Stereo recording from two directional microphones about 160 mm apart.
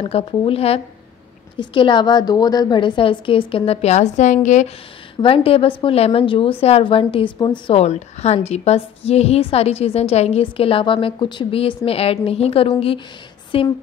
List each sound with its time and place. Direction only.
0.0 s a woman's voice: 35° left (ahead or behind)
5.2 s a woman's voice: 35° left (ahead or behind)